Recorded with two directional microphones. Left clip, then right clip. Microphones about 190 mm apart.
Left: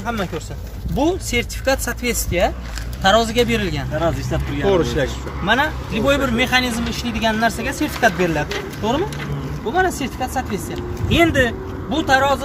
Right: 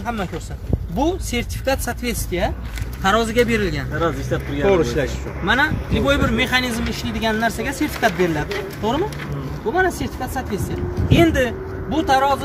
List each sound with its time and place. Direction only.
0.0 s speech: centre (ahead or behind)
4.6 s speech: 35° right (ahead or behind)
5.4 s speech: 5° left (ahead or behind); by 12.4 s 10° right (ahead or behind)